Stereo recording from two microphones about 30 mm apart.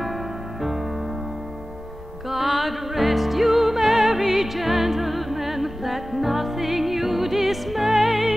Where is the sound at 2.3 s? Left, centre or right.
Centre.